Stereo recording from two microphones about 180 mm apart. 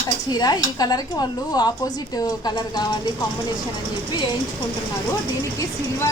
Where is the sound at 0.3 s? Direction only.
20° left (ahead or behind).